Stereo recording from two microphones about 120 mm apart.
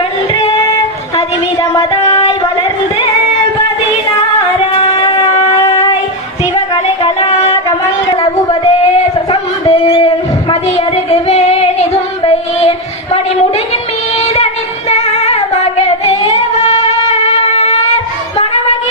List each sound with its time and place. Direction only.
1.7 s music: 30° left (ahead or behind)
5.1 s train: 65° left (ahead or behind)
6.5 s music: 55° left (ahead or behind)
9.6 s a sound: 60° left (ahead or behind)
10.5 s female singing: 60° left (ahead or behind)
14.2 s child singing: 65° left (ahead or behind)
14.8 s female singing: 65° left (ahead or behind)
16.6 s wind instrument: 65° left (ahead or behind)